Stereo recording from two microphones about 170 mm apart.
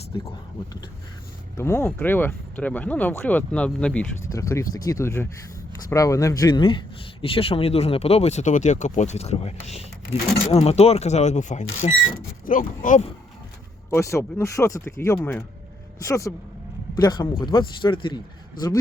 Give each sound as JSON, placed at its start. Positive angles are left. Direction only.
{"t": 1.5, "sound": "speech", "side_deg": 15}
{"t": 4.3, "sound": "speech", "side_deg": 20}
{"t": 13.9, "sound": "speech", "side_deg": 15}